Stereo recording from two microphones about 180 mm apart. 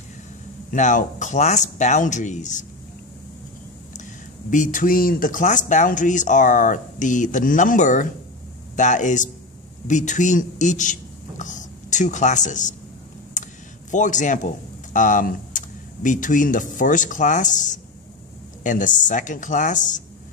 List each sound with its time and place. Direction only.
0.7 s speech: 45° left (ahead or behind)
3.9 s a man's voice: 45° left (ahead or behind)
13.4 s vehicle: 45° left (ahead or behind)
13.8 s speech: 45° left (ahead or behind)